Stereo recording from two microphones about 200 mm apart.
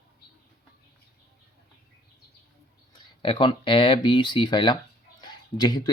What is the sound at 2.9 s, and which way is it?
Speech, 25° left (ahead or behind).